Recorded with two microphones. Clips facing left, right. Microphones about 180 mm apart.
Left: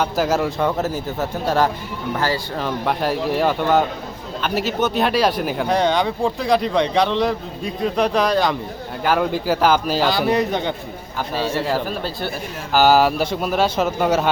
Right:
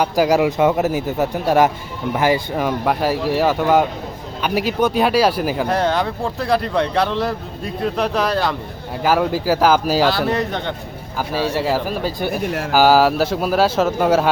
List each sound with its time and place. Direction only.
0.0 s speech: 10° right (ahead or behind)
11.5 s speech: 10° right (ahead or behind)